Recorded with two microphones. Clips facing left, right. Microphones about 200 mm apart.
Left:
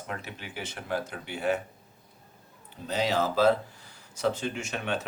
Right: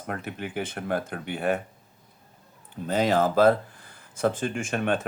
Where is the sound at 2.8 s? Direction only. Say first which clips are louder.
Right 5 dB; 50° right (ahead or behind).